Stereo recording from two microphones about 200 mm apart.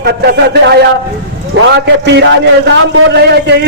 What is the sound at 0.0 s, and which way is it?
A man's voice, 55° right (ahead or behind).